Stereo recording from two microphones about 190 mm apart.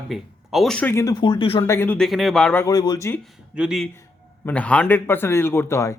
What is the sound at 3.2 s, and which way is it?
Speech, 5° right (ahead or behind).